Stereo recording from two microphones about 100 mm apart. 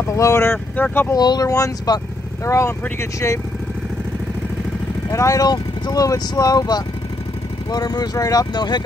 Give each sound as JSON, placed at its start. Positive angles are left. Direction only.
{"t": 0.1, "sound": "speech", "side_deg": 30}
{"t": 1.1, "sound": "speech", "side_deg": 45}
{"t": 5.1, "sound": "speech", "side_deg": 35}